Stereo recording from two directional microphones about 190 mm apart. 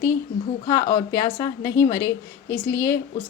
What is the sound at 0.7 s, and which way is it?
A woman's voice, 15° left (ahead or behind).